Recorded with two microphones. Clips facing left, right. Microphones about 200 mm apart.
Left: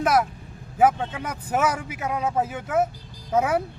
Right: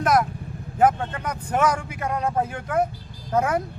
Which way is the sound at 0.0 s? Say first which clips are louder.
Right 1 dB; 5° left (ahead or behind).